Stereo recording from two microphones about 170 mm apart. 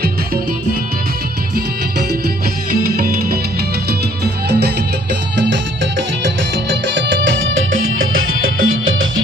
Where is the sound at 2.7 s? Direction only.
60° right (ahead or behind).